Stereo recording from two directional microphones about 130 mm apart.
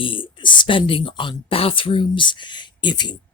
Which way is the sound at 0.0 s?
40° left (ahead or behind).